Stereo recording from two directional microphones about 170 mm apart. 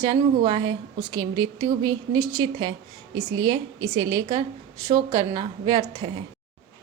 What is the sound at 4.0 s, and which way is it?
A woman's voice, 25° right (ahead or behind).